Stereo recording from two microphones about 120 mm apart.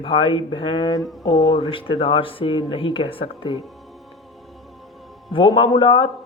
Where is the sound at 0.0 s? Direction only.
45° left (ahead or behind).